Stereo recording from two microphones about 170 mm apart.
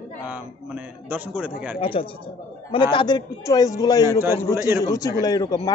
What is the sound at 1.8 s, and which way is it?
A man's voice, 35° left (ahead or behind).